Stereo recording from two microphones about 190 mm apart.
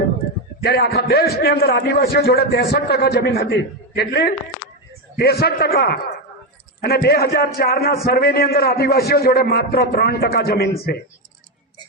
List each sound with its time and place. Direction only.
0.6 s a man's voice: 55° left (ahead or behind)